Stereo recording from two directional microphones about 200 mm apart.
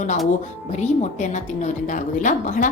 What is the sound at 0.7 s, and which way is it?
A woman's voice, 35° left (ahead or behind).